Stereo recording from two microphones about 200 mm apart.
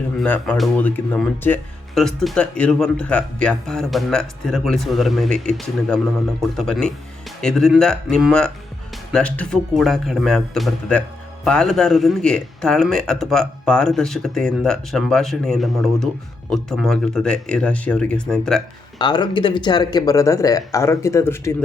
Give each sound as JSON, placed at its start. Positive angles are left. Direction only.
{"t": 0.2, "sound": "speech", "side_deg": 5}
{"t": 18.9, "sound": "speech", "side_deg": 20}